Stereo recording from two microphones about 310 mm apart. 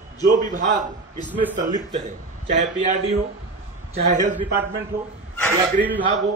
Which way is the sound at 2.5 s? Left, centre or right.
Right.